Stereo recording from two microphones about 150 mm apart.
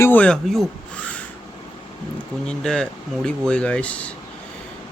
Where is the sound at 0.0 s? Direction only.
10° left (ahead or behind).